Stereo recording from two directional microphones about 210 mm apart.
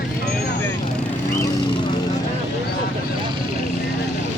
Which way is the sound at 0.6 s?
15° left (ahead or behind).